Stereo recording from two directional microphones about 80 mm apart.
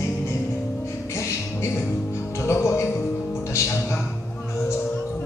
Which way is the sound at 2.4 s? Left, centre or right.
Left.